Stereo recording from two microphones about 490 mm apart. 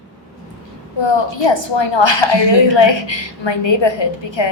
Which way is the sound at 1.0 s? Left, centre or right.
Left.